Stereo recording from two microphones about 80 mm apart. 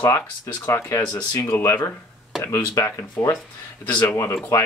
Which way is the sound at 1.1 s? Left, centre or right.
Left.